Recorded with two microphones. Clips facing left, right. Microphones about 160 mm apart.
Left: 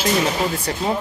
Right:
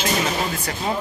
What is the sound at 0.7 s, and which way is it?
Speech, 30° left (ahead or behind).